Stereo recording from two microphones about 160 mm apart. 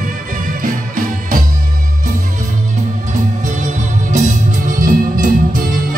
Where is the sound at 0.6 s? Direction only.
60° right (ahead or behind).